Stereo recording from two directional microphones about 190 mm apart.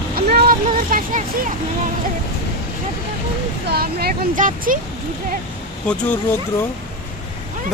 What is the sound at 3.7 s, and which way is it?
Speech, 55° right (ahead or behind).